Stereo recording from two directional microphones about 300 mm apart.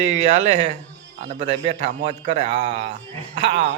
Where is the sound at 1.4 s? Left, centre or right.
Centre.